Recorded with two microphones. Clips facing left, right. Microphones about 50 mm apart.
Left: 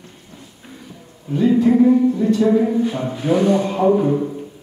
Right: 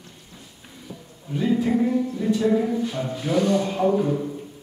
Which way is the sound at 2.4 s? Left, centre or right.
Centre.